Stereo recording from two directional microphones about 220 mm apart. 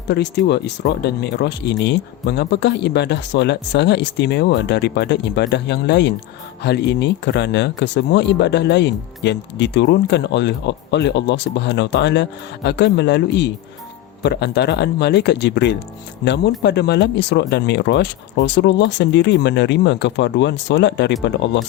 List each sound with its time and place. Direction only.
0.1 s speech: 50° left (ahead or behind)